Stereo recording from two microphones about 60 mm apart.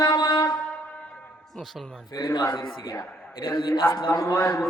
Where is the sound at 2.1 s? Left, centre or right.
Left.